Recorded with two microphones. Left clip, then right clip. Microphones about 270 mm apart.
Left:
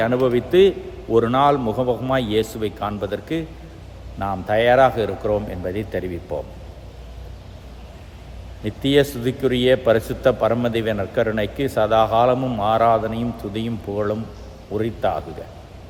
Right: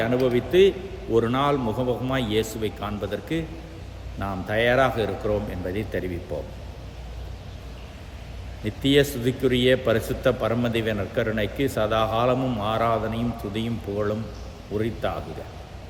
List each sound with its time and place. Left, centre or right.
0.0 s a man's voice: centre
8.6 s a man's voice: centre